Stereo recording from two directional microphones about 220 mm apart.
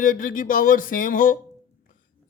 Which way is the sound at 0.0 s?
40° left (ahead or behind).